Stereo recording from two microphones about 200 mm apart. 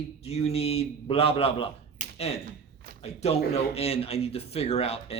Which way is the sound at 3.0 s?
30° left (ahead or behind).